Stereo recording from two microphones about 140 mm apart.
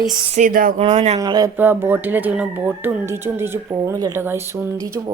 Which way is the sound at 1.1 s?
25° right (ahead or behind).